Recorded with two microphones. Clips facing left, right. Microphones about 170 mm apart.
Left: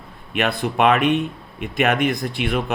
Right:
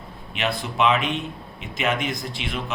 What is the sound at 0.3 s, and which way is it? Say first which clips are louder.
Speech: left 4 dB; 60° left (ahead or behind).